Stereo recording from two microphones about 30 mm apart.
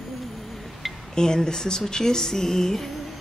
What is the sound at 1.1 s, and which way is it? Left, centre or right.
Speech, left.